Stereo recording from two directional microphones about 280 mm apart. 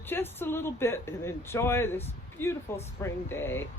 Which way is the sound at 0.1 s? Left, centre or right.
Centre.